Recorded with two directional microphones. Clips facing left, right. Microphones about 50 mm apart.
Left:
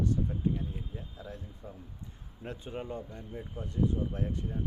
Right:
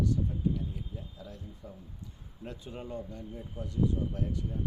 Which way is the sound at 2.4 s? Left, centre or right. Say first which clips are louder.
Left 2 dB; left.